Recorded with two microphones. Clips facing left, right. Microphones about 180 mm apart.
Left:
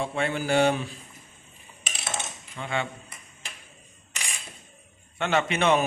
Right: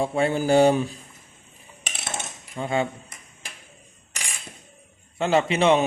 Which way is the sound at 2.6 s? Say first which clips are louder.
Right 6 dB; 40° right (ahead or behind).